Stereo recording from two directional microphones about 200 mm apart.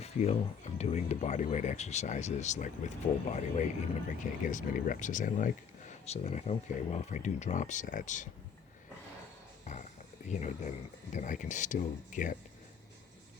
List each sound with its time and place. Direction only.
0.0 s speech: 35° left (ahead or behind)
10.2 s speech: 35° left (ahead or behind)